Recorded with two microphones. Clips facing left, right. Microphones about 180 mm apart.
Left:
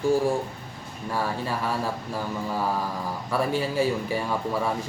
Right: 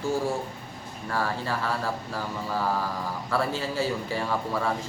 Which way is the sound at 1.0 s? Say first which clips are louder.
Left 1 dB; 15° left (ahead or behind).